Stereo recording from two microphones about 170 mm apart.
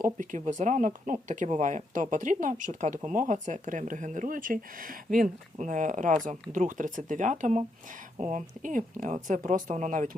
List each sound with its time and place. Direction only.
0.0 s speech: 50° right (ahead or behind)